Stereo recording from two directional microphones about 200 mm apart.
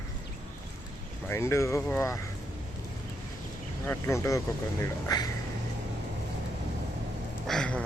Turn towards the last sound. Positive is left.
turn(degrees=5)  # may be behind; listen again after turning